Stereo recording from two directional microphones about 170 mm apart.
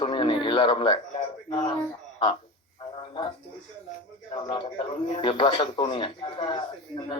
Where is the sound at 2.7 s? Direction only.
30° left (ahead or behind).